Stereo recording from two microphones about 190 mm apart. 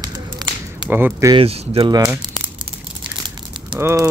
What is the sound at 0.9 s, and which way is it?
Speech, 10° right (ahead or behind).